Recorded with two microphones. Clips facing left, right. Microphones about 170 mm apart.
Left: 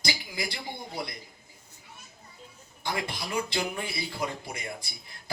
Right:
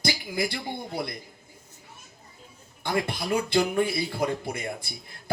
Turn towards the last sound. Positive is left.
turn(degrees=-55)  # may be behind; listen again after turning